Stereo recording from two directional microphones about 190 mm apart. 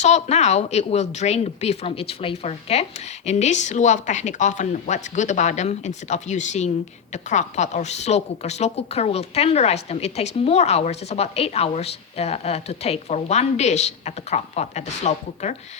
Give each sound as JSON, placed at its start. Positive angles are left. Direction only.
{"t": 0.0, "sound": "a woman's voice", "side_deg": 35}